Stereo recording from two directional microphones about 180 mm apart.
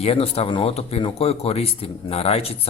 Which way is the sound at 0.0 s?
35° left (ahead or behind).